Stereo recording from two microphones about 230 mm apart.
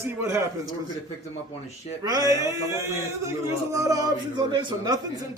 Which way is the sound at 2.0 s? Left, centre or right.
Centre.